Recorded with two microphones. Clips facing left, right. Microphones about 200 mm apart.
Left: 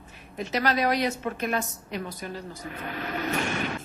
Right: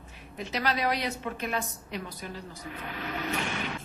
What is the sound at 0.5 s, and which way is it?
A woman's voice, 45° left (ahead or behind).